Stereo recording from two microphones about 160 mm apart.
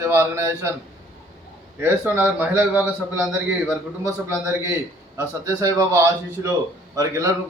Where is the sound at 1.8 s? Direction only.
10° right (ahead or behind).